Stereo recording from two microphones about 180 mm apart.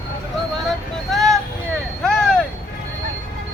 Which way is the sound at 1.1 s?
Centre (ahead or behind).